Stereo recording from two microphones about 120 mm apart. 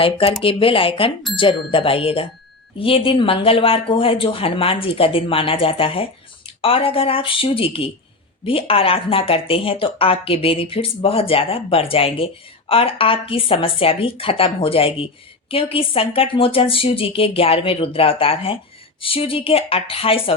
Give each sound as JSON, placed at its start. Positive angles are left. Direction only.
{"t": 0.0, "sound": "speech", "side_deg": 50}